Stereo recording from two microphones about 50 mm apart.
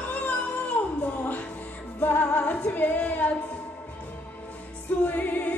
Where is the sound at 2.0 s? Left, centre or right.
Left.